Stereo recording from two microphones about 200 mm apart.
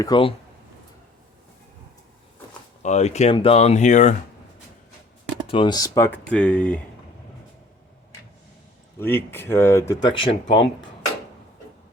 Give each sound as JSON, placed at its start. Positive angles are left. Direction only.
{"t": 0.0, "sound": "speech", "side_deg": 25}
{"t": 2.8, "sound": "speech", "side_deg": 35}
{"t": 5.5, "sound": "speech", "side_deg": 25}
{"t": 9.0, "sound": "speech", "side_deg": 10}